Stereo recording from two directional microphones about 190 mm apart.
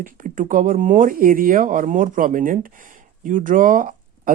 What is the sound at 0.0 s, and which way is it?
Speech, 45° right (ahead or behind).